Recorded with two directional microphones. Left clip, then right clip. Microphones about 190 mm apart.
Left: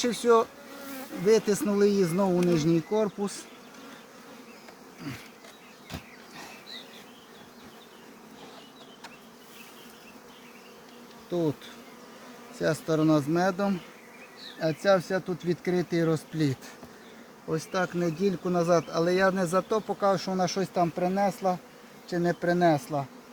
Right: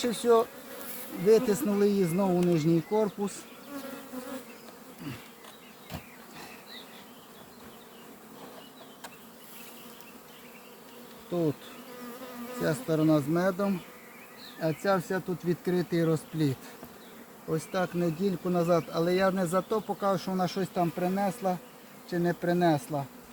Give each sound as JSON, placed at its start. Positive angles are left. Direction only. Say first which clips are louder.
{"t": 0.0, "sound": "speech", "louder": "left 2 dB", "side_deg": 20}
{"t": 11.3, "sound": "bee", "louder": "left 1 dB", "side_deg": 15}
{"t": 12.6, "sound": "speech", "louder": "left 2 dB", "side_deg": 20}